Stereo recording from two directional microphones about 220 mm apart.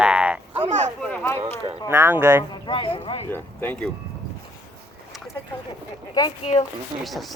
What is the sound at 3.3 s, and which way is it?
Speech, 10° left (ahead or behind).